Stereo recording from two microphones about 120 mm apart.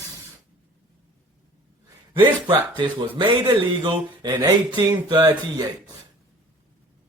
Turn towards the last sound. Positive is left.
turn(degrees=-35)  # may be behind; listen again after turning